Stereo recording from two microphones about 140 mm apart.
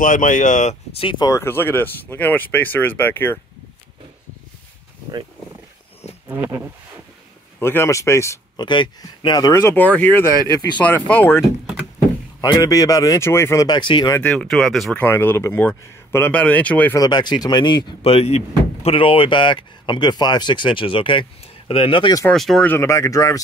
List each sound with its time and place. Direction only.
0.0 s speech: 65° left (ahead or behind)
0.9 s speech: 35° left (ahead or behind)
1.4 s speech: 15° left (ahead or behind)
6.2 s wild animals: 20° right (ahead or behind)
7.6 s speech: 20° left (ahead or behind)
8.5 s speech: 35° left (ahead or behind)
10.8 s speech: 10° left (ahead or behind)
12.4 s speech: 25° left (ahead or behind)
13.7 s speech: 35° left (ahead or behind)
14.1 s speech: 10° left (ahead or behind)
15.0 s speech: 15° left (ahead or behind)
16.9 s speech: 30° left (ahead or behind)
22.3 s speech: 5° left (ahead or behind)
22.7 s speech: 20° left (ahead or behind)